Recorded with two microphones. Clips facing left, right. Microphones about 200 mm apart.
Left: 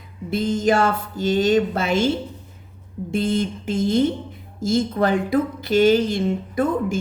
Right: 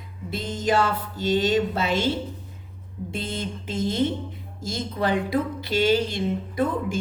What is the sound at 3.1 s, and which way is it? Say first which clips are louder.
Speech: left 10 dB; 50° left (ahead or behind).